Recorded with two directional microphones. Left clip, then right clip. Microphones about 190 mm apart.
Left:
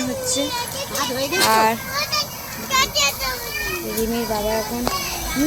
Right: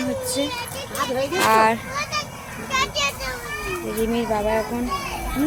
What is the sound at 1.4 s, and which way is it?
Speech, centre (ahead or behind).